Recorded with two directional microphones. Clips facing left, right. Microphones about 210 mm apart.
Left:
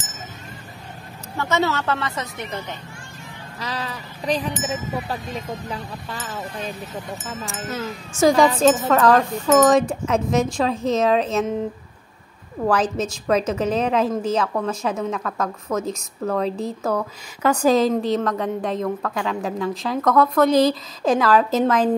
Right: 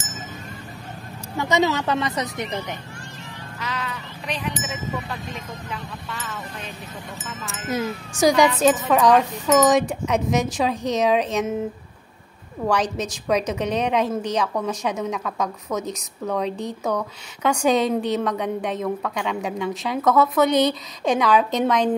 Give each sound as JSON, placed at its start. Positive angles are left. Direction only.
{"t": 1.3, "sound": "speech", "side_deg": -15}
{"t": 3.5, "sound": "speech", "side_deg": 35}
{"t": 7.7, "sound": "speech", "side_deg": -15}
{"t": 8.5, "sound": "a woman's voice", "side_deg": -5}
{"t": 12.6, "sound": "a woman's voice", "side_deg": 5}